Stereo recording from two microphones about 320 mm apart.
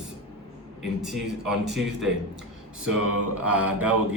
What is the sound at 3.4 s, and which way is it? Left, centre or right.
Speech, centre.